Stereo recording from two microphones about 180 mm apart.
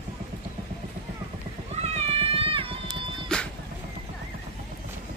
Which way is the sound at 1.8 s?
35° right (ahead or behind).